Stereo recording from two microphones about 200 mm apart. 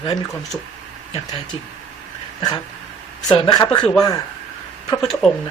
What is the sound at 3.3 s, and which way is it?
Speech, 20° left (ahead or behind).